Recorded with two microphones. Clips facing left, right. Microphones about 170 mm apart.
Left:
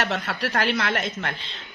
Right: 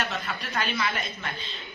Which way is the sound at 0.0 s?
85° left.